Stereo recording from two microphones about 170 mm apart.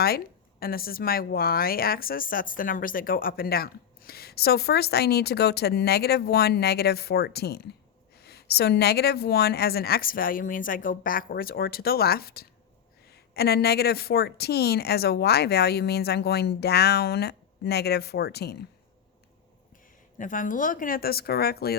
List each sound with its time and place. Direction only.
0.6 s speech: 60° left (ahead or behind)
20.1 s speech: 50° left (ahead or behind); by 21.8 s 65° left (ahead or behind)